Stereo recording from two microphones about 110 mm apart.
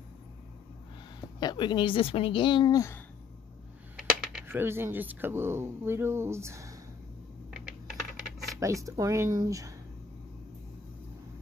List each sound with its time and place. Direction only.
1.4 s a woman's voice: 40° left (ahead or behind)
2.7 s speech: 30° left (ahead or behind)
3.9 s coin: 5° right (ahead or behind)
4.5 s speech: 20° right (ahead or behind)
7.5 s typing: centre (ahead or behind)
8.5 s speech: 30° right (ahead or behind)